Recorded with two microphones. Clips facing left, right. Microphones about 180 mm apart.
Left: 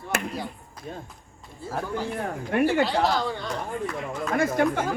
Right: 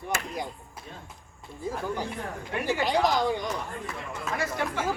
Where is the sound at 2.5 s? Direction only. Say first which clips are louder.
Left 7 dB; 55° left (ahead or behind).